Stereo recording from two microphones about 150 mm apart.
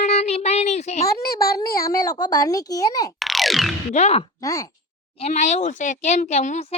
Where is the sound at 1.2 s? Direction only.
90° left.